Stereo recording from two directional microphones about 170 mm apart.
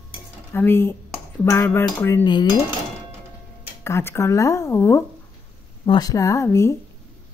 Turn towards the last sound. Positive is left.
turn(degrees=15)  # may be behind; listen again after turning